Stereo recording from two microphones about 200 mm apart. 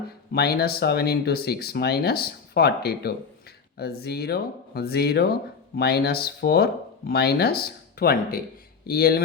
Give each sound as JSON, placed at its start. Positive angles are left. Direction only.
{"t": 0.3, "sound": "speech", "side_deg": 50}